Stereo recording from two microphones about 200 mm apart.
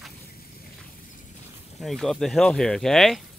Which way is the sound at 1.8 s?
Centre (ahead or behind).